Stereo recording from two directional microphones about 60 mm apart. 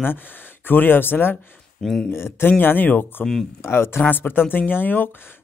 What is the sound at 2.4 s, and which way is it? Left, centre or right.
Speech, left.